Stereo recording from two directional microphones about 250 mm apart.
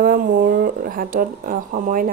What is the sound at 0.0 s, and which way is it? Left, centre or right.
Speech, right.